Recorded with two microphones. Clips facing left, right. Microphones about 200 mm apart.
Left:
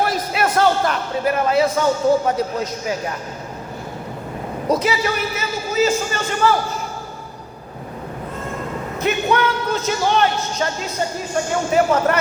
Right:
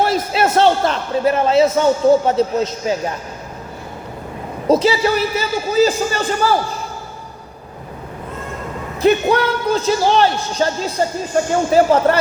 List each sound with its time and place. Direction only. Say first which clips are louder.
0.0 s a man's voice: right 3 dB; 25° right (ahead or behind)
4.7 s speech: right 6 dB; 30° right (ahead or behind)
9.0 s speech: right 5 dB; 35° right (ahead or behind)
11.7 s speech: right 3 dB; 30° right (ahead or behind)